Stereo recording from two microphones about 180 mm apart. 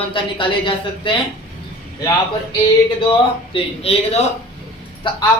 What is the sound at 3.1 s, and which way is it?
A man's voice, 30° left (ahead or behind).